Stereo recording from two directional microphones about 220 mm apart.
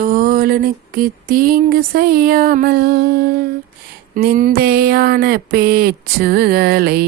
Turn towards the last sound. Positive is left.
turn(degrees=-45)  # may be behind; listen again after turning